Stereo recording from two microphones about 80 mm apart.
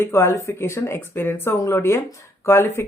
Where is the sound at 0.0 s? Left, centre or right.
Left.